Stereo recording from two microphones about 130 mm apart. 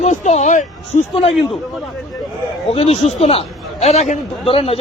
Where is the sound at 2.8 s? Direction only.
55° left (ahead or behind).